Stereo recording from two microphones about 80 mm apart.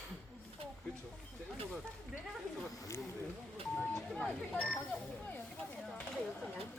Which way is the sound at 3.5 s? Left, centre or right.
Centre.